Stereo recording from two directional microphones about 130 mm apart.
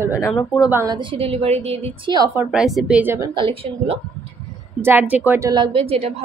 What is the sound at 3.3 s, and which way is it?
Speech, 45° right (ahead or behind).